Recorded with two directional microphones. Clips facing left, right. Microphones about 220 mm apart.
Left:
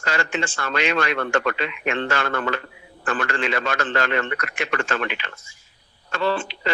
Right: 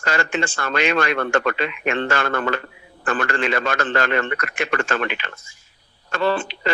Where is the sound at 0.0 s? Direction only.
50° right (ahead or behind).